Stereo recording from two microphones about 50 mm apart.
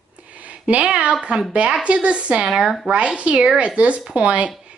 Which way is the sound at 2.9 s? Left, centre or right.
Right.